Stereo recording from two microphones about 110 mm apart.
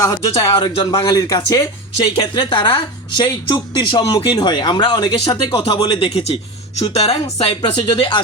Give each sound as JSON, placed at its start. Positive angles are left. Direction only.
{"t": 0.0, "sound": "speech", "side_deg": 30}
{"t": 0.6, "sound": "speech", "side_deg": 45}
{"t": 1.0, "sound": "speech", "side_deg": 35}
{"t": 6.8, "sound": "speech", "side_deg": 70}